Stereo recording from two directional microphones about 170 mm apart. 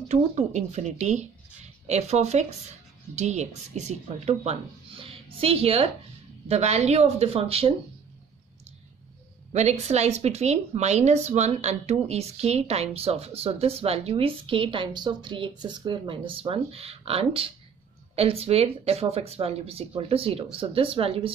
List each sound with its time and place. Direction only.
0.1 s speech: 40° right (ahead or behind)
9.5 s speech: 40° right (ahead or behind)